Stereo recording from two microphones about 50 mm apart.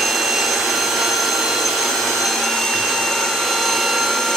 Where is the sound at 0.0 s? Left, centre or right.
Centre.